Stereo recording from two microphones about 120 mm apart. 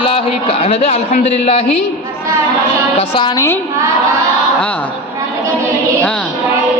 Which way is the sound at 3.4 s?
20° left (ahead or behind).